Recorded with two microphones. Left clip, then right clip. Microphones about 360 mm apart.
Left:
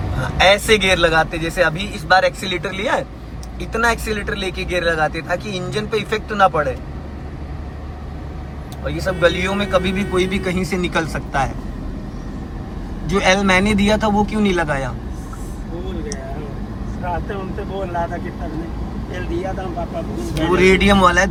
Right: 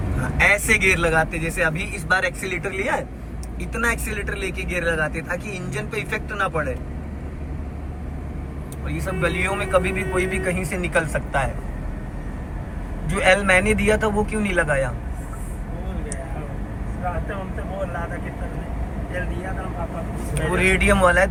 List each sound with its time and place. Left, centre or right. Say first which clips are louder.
0.2 s speech: left 4 dB; centre
8.9 s speech: left 8 dB; centre
13.1 s speech: left 2 dB; centre
20.3 s speech: left 6 dB; centre